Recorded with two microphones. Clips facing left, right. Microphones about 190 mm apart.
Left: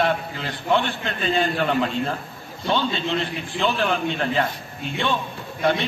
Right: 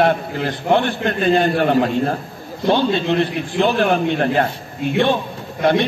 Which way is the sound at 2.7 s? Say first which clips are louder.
Right 7 dB; 60° right (ahead or behind).